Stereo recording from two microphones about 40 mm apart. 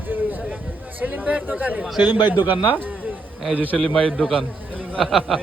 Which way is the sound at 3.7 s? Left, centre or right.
Left.